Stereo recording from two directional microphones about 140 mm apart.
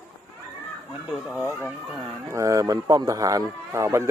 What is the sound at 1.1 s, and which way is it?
Speech, 5° right (ahead or behind).